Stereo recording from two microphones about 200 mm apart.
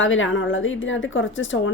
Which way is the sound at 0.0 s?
75° left (ahead or behind).